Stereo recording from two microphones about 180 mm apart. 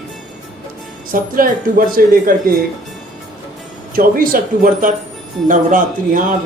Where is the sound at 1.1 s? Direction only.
50° right (ahead or behind).